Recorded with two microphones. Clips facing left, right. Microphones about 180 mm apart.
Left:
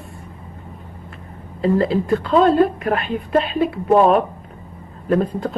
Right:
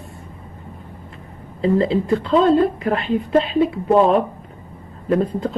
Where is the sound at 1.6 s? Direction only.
25° right (ahead or behind).